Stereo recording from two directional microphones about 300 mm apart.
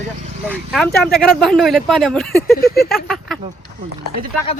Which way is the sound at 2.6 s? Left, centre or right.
Left.